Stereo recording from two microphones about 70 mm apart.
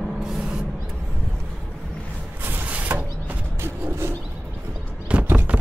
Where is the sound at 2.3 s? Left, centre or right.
Right.